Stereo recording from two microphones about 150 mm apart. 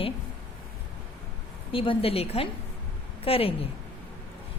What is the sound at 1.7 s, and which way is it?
A woman's voice, 35° left (ahead or behind).